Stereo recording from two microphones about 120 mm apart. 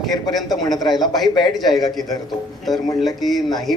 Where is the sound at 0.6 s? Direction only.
35° left (ahead or behind).